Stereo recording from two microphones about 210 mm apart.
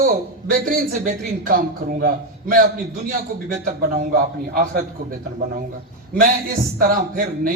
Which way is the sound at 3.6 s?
40° right (ahead or behind).